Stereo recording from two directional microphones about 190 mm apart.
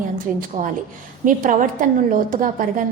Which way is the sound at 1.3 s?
45° right (ahead or behind).